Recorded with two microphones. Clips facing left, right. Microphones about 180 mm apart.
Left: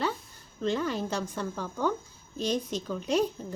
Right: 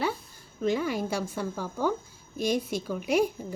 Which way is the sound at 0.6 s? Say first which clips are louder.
Right 2 dB; 10° right (ahead or behind).